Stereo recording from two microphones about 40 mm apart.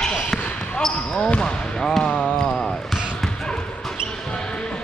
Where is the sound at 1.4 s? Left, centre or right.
Centre.